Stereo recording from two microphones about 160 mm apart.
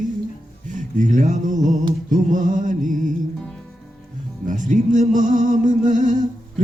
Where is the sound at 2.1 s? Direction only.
55° right (ahead or behind).